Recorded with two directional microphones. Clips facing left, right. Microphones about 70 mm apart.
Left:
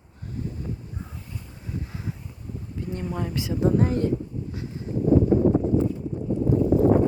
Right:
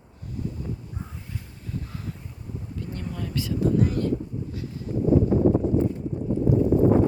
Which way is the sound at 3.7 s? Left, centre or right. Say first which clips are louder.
Left 1 dB; left.